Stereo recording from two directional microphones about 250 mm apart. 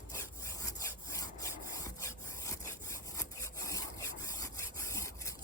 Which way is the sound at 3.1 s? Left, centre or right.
Centre.